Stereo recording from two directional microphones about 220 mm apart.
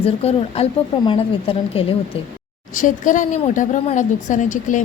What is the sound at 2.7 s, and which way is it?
A woman's voice, 35° left (ahead or behind).